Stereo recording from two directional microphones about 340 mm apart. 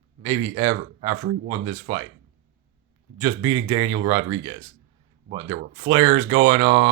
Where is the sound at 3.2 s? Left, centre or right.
Centre.